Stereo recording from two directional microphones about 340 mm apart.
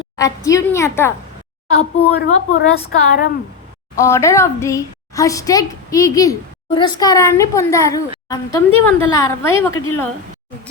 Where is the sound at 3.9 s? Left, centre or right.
Centre.